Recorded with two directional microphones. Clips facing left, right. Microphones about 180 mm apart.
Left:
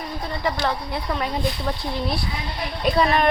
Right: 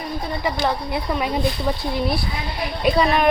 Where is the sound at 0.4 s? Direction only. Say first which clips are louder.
Right 1 dB; 10° right (ahead or behind).